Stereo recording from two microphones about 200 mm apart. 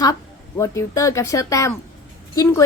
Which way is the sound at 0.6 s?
15° left (ahead or behind).